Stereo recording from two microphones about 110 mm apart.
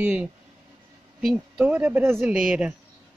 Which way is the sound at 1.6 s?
15° right (ahead or behind).